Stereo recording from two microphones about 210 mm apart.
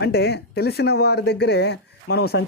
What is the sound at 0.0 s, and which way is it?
Speech, 50° left (ahead or behind).